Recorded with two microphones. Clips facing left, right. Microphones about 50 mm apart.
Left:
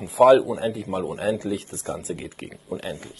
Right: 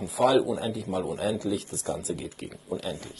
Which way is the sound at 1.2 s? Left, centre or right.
Left.